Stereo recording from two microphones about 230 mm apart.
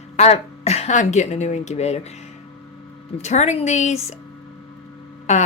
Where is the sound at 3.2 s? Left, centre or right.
Left.